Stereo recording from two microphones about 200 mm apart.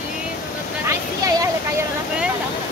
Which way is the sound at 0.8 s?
15° right (ahead or behind).